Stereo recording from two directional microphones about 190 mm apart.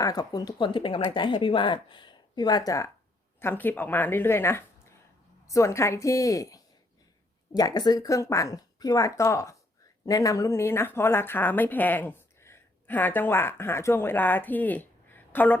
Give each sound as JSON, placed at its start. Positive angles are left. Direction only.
{"t": 0.0, "sound": "a woman's voice", "side_deg": 20}